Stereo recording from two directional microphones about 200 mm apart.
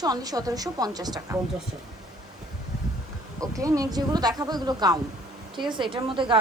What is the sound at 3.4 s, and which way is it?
A woman's voice, 15° right (ahead or behind).